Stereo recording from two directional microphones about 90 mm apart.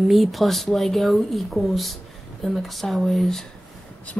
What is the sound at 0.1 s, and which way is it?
Speech, centre (ahead or behind).